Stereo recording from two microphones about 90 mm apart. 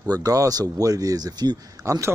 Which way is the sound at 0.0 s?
45° right (ahead or behind).